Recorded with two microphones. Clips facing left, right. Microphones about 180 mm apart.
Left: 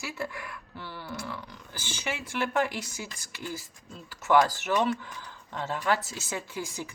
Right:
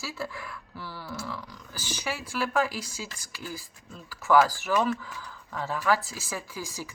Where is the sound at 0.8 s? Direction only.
20° left (ahead or behind).